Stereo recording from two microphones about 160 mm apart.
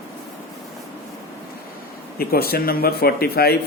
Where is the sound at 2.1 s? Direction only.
70° left (ahead or behind).